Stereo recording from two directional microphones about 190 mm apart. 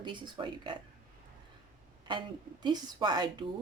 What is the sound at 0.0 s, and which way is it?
Speech, 25° right (ahead or behind).